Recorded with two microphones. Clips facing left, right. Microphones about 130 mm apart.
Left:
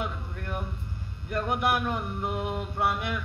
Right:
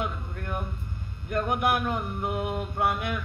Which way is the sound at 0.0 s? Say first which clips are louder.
Right 2 dB; 50° right (ahead or behind).